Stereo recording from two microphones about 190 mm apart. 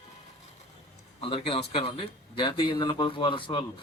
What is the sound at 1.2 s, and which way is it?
Speech, 30° left (ahead or behind).